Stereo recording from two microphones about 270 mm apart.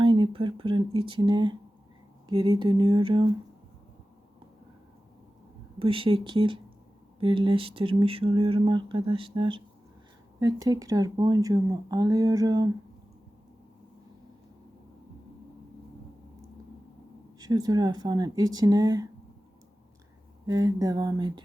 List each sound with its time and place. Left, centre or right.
0.0 s speech: centre
5.8 s speech: centre
17.4 s speech: centre
20.5 s speech: centre